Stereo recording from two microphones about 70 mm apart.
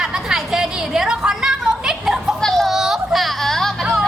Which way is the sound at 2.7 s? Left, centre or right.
Centre.